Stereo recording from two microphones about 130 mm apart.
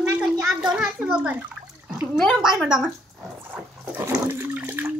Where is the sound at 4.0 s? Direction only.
20° right (ahead or behind).